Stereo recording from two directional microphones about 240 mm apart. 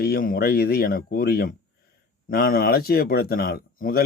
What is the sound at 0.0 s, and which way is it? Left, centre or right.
Speech, left.